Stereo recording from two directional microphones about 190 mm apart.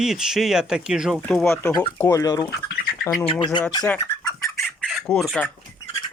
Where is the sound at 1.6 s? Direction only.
20° left (ahead or behind).